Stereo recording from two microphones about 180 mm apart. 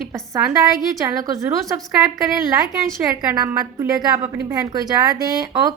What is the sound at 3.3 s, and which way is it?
A woman's voice, 15° right (ahead or behind).